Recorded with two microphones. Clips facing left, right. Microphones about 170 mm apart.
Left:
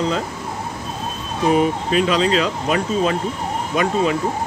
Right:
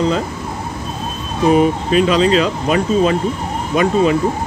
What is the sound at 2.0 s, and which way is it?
Speech, 15° right (ahead or behind).